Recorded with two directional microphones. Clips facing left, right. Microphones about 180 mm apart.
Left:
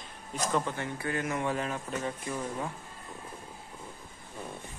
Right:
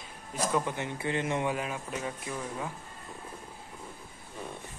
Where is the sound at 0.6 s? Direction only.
15° right (ahead or behind).